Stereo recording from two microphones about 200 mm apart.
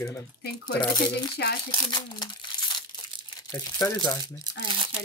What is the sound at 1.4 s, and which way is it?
Speech, 55° left (ahead or behind).